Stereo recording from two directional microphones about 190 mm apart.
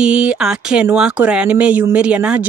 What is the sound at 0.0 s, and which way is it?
Speech, 5° right (ahead or behind).